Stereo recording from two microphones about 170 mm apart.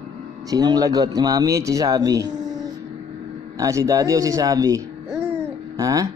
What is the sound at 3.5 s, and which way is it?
Speech, 20° right (ahead or behind).